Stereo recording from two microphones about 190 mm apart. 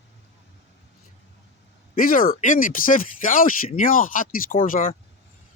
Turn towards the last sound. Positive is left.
turn(degrees=45)  # may be behind; listen again after turning